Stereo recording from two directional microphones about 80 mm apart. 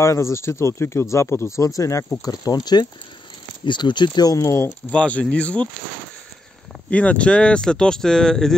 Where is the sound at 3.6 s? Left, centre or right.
Left.